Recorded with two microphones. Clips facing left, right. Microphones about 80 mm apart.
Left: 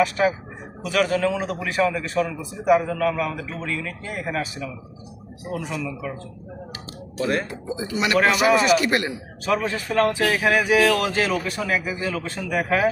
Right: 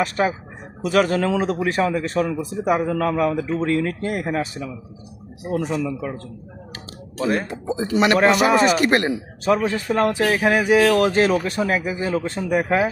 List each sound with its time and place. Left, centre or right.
0.0 s a man's voice: right
3.8 s a man's voice: right
5.5 s a man's voice: right
7.7 s a man's voice: right
8.1 s a man's voice: right
9.5 s speech: right